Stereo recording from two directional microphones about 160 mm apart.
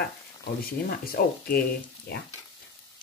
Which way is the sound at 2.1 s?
85° left.